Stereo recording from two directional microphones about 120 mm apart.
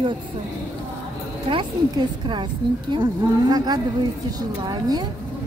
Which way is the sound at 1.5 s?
40° right (ahead or behind).